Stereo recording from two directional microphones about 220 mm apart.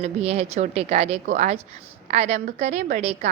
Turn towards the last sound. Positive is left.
turn(degrees=-30)  # may be behind; listen again after turning